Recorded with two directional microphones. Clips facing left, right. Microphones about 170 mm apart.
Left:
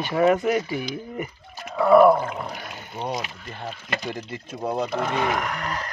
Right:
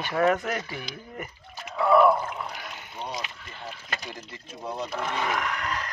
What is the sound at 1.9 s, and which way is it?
Speech, 40° left (ahead or behind).